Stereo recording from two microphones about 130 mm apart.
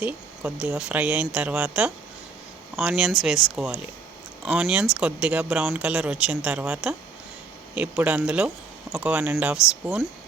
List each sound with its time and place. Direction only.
0.0 s speech: 10° right (ahead or behind)
9.2 s speech: 15° right (ahead or behind)